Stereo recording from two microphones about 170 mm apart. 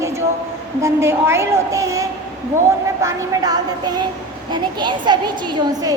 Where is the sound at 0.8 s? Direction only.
15° right (ahead or behind).